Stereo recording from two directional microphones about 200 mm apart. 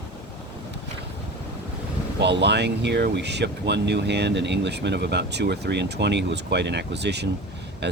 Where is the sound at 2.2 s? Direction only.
60° right (ahead or behind).